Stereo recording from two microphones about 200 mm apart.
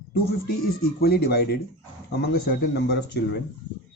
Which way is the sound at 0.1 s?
50° left (ahead or behind).